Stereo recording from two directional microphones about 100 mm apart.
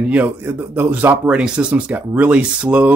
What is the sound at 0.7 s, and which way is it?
Speech, 20° right (ahead or behind).